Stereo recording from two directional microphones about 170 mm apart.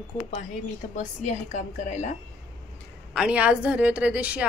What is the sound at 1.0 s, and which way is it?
A woman's voice, 45° left (ahead or behind).